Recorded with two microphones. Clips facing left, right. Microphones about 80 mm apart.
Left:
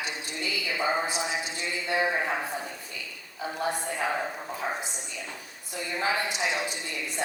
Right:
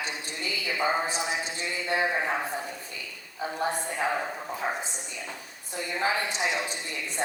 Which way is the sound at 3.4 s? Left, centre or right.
Right.